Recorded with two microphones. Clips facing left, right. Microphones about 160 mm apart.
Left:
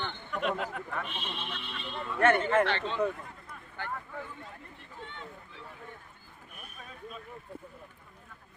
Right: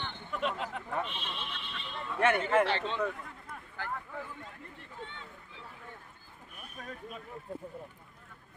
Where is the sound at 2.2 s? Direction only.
10° right (ahead or behind).